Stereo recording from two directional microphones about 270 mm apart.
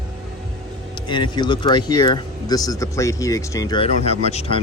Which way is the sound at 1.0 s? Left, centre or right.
Centre.